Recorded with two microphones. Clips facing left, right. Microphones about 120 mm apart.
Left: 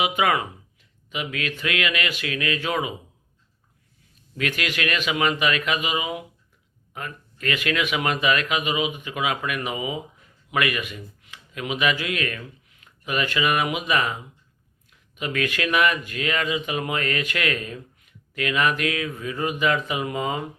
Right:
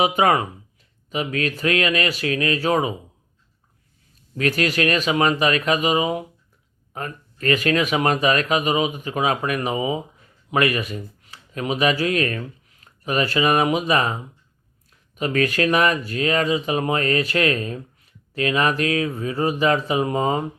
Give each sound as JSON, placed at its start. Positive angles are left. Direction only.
{"t": 0.0, "sound": "speech", "side_deg": -40}
{"t": 4.4, "sound": "speech", "side_deg": -40}